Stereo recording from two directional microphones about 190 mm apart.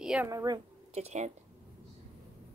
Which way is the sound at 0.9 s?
35° right (ahead or behind).